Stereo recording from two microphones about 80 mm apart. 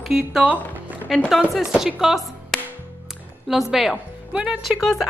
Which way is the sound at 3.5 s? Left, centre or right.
Centre.